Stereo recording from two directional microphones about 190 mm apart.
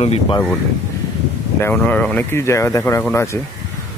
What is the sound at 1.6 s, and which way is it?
Speech, 10° left (ahead or behind).